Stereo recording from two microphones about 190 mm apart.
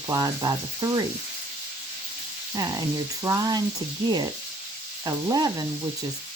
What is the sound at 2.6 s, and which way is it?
Speech, 20° right (ahead or behind).